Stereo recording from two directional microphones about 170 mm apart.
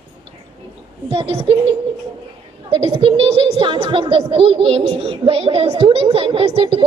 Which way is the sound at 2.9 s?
30° right (ahead or behind).